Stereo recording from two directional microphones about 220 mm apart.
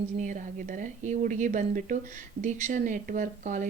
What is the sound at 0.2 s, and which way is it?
Speech, 35° right (ahead or behind).